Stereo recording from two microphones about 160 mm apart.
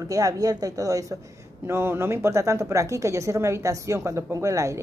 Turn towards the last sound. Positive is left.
turn(degrees=-20)  # may be behind; listen again after turning